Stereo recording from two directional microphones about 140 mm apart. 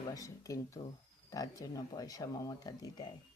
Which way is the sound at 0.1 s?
25° left (ahead or behind).